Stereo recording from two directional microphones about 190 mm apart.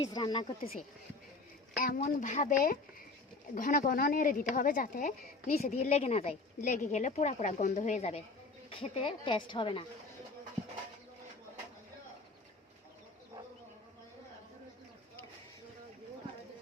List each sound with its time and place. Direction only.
0.0 s a woman's voice: 20° left (ahead or behind)
1.7 s a woman's voice: 50° left (ahead or behind); by 9.8 s 25° left (ahead or behind)